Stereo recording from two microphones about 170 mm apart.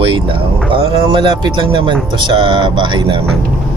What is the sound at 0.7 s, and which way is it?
Speech, 30° right (ahead or behind).